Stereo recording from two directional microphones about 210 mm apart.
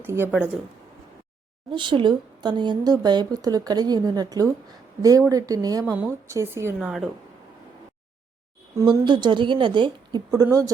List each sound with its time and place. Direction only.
0.0 s speech: 10° right (ahead or behind)
1.7 s a woman's voice: 25° right (ahead or behind); by 7.1 s centre (ahead or behind)
8.7 s a woman's voice: 20° right (ahead or behind)